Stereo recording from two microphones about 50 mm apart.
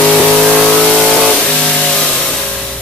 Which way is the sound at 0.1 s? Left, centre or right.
Centre.